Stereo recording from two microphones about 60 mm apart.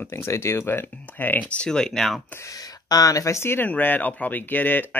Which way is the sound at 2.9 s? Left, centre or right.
Left.